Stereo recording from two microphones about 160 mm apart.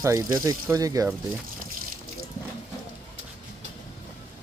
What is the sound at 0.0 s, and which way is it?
Speech, 20° right (ahead or behind).